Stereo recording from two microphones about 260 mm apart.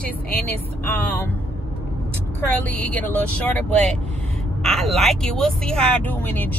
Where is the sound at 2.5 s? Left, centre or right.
Centre.